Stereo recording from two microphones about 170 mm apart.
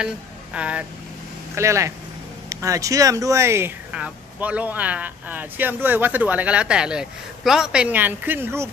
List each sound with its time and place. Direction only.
0.0 s speech: 5° right (ahead or behind)